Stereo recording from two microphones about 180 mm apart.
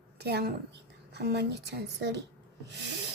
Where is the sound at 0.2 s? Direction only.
65° right (ahead or behind).